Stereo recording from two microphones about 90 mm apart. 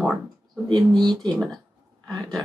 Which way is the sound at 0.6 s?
55° right (ahead or behind).